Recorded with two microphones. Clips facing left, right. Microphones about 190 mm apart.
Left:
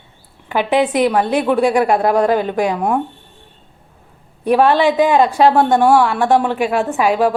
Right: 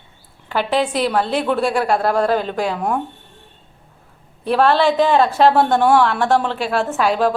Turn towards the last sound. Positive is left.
turn(degrees=10)  # may be behind; listen again after turning